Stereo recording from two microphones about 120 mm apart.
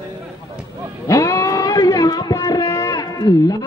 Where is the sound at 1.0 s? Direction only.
25° left (ahead or behind).